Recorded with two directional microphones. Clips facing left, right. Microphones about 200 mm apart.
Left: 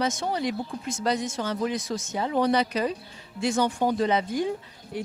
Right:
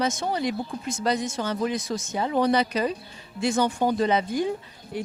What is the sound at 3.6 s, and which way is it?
Speech, 30° right (ahead or behind).